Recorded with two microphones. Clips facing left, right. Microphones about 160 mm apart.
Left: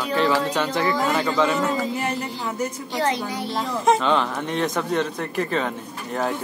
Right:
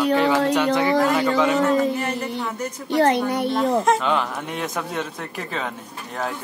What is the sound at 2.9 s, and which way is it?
Speech, 60° right (ahead or behind).